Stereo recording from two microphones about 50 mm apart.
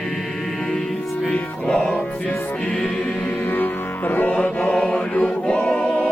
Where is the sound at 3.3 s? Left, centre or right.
Left.